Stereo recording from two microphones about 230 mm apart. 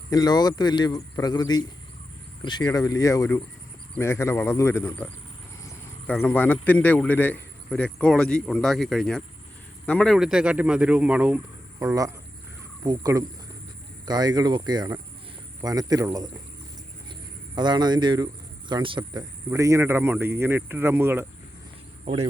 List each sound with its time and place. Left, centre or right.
0.1 s speech: centre
17.5 s speech: centre